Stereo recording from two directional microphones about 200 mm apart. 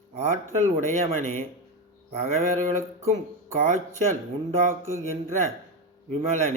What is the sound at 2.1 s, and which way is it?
Speech, 35° right (ahead or behind).